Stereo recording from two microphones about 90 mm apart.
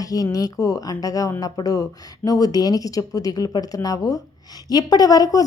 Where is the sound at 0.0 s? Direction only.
40° left (ahead or behind).